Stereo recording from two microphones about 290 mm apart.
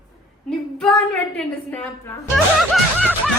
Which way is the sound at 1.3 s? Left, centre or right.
Centre.